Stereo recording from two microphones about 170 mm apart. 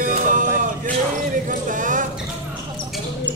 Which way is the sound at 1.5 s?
50° right (ahead or behind).